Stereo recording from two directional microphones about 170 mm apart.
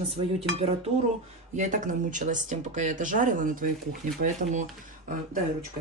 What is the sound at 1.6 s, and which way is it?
Speech, 50° right (ahead or behind).